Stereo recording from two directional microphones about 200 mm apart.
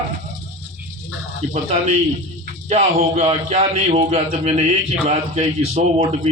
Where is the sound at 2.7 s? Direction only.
35° right (ahead or behind).